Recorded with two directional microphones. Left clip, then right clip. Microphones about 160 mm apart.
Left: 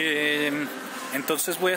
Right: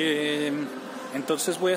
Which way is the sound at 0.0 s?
Centre (ahead or behind).